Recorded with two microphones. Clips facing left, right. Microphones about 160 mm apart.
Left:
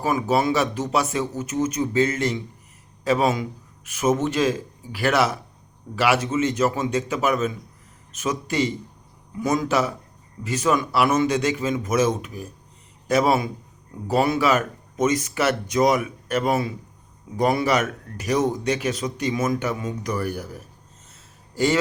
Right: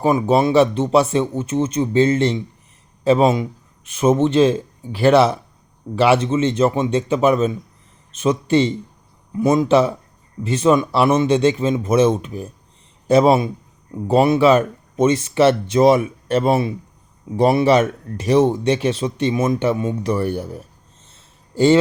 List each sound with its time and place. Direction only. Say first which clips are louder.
0.0 s a man's voice: right 5 dB; 30° right (ahead or behind)